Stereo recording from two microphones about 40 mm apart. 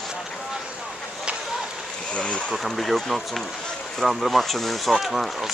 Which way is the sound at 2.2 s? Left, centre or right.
Left.